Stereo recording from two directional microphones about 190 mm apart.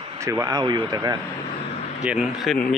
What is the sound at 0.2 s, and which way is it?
Speech, 15° right (ahead or behind).